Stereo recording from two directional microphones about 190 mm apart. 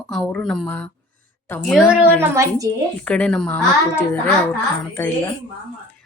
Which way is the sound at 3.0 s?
5° left (ahead or behind).